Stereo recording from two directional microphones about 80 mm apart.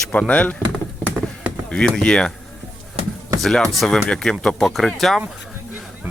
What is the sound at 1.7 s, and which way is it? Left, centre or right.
Speech, centre.